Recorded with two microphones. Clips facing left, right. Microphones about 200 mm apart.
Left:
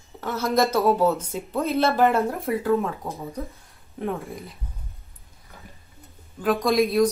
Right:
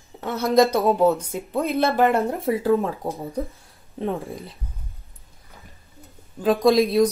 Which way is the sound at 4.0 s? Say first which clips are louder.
Right 2 dB; 30° right (ahead or behind).